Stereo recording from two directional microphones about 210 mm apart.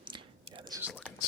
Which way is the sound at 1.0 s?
10° left (ahead or behind).